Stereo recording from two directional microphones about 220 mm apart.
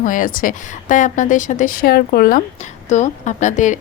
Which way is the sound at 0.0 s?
40° left (ahead or behind).